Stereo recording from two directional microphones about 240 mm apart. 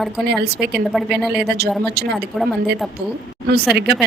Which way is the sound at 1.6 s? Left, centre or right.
Right.